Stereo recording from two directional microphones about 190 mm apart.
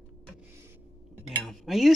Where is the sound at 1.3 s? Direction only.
Centre (ahead or behind).